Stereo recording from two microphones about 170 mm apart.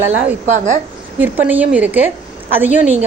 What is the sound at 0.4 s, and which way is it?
Speech, 45° right (ahead or behind).